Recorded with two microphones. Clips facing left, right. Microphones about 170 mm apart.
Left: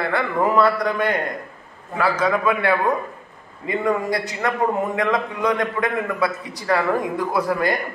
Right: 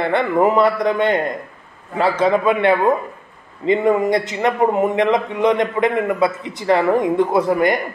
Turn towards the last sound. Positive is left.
turn(degrees=-20)  # may be behind; listen again after turning